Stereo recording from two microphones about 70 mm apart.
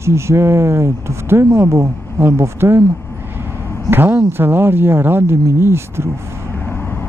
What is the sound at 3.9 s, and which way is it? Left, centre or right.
Speech, right.